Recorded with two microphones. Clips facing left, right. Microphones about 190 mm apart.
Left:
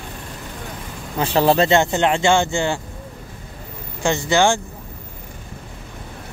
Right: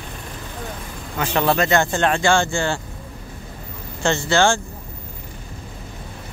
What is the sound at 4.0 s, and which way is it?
Speech, 15° left (ahead or behind).